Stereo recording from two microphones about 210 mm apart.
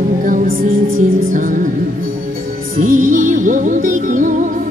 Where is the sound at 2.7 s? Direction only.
40° right (ahead or behind).